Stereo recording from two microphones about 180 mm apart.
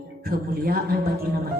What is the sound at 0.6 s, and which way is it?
Speech, 55° right (ahead or behind).